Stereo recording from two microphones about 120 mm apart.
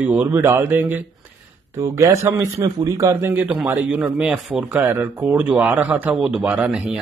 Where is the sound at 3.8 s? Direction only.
10° right (ahead or behind).